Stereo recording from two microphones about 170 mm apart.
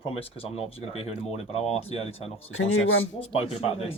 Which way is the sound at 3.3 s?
35° left (ahead or behind).